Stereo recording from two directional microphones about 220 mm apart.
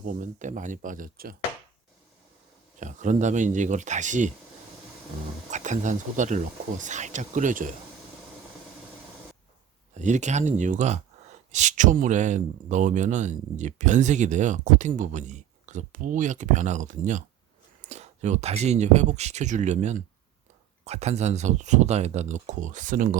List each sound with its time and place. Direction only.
0.0 s speech: 35° right (ahead or behind)
2.7 s speech: 35° right (ahead or behind)
5.5 s speech: 35° right (ahead or behind)
9.9 s speech: 35° right (ahead or behind)